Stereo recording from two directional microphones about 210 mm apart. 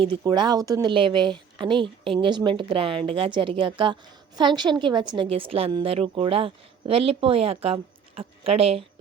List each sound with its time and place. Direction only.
0.0 s a woman's voice: 20° right (ahead or behind)